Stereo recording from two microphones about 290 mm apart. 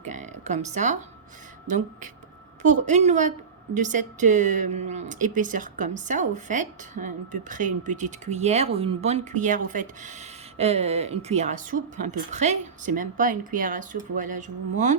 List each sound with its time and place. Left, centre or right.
0.0 s a woman's voice: right